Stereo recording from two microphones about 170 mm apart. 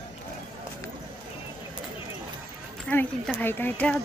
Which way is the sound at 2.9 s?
10° left (ahead or behind).